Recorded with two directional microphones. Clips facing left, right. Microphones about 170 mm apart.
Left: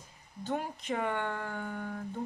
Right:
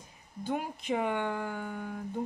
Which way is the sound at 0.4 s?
10° right (ahead or behind).